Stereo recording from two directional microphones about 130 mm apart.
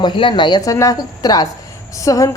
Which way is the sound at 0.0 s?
40° left (ahead or behind).